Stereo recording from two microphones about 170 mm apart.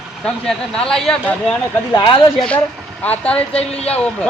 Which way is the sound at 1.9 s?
30° left (ahead or behind).